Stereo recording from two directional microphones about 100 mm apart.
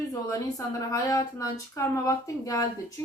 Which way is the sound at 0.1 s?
35° left (ahead or behind).